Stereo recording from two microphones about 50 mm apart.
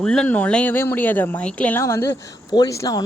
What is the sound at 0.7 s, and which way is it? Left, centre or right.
Speech, left.